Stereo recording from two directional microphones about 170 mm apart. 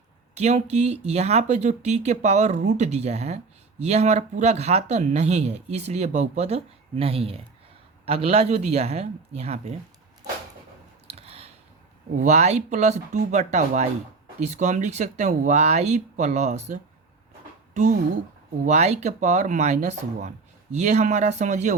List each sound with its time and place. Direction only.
0.3 s speech: 40° right (ahead or behind)
11.1 s a sound: 35° right (ahead or behind)
12.1 s speech: 45° right (ahead or behind)
18.6 s speech: 40° right (ahead or behind)